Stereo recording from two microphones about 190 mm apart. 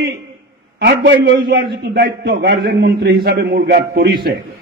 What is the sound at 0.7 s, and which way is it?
A man's voice, 65° right (ahead or behind).